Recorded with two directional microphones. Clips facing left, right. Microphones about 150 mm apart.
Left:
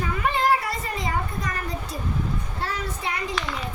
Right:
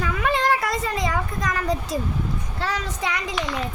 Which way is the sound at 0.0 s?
90° right.